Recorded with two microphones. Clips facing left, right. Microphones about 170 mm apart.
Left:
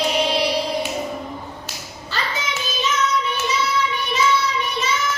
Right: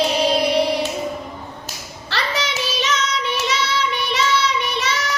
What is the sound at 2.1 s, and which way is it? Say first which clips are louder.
Child singing: right 3 dB; 80° right.